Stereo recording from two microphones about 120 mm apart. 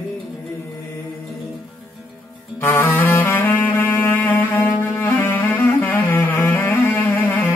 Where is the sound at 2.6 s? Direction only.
20° left (ahead or behind).